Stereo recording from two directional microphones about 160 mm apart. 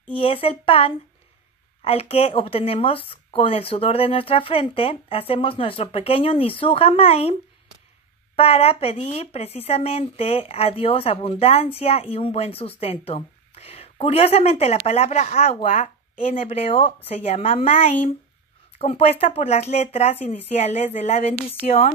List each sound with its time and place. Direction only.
0.1 s speech: 35° left (ahead or behind)
8.4 s speech: 40° left (ahead or behind)